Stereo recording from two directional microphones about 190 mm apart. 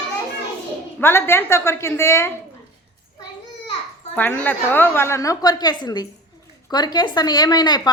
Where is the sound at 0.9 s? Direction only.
10° left (ahead or behind).